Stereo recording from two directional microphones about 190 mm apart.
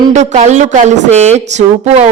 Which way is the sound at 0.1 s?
40° right (ahead or behind).